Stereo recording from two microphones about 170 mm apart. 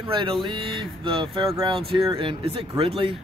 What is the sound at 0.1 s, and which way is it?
Speech, 25° right (ahead or behind).